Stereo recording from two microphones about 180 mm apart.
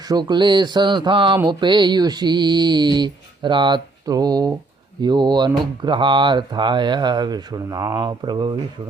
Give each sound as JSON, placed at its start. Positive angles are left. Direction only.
{"t": 0.1, "sound": "speech", "side_deg": -25}